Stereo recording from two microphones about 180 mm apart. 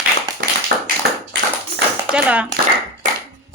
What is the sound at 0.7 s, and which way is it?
Tap, 60° right (ahead or behind).